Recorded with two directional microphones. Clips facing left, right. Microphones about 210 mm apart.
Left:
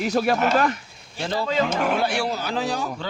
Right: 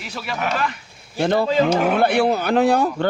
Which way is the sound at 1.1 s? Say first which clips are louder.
Right 6 dB; 60° right (ahead or behind).